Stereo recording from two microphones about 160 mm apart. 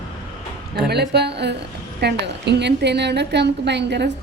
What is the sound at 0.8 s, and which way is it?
A woman's voice, 90° right.